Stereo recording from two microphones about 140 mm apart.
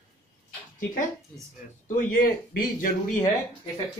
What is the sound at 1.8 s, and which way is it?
Speech, 85° left.